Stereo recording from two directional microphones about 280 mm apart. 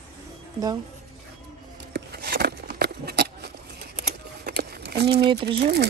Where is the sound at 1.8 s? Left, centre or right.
Right.